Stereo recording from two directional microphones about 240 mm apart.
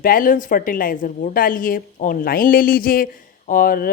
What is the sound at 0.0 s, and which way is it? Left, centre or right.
A woman's voice, left.